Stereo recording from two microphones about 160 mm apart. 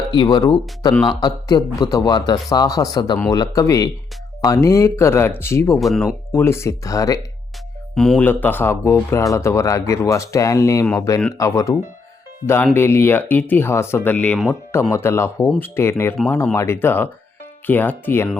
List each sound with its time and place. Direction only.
0.1 s a man's voice: 30° left (ahead or behind)
7.9 s a man's voice: 5° left (ahead or behind)
12.7 s speech: 15° left (ahead or behind)